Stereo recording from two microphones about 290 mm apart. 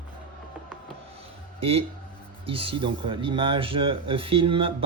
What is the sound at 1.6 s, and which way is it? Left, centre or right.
Speech, centre.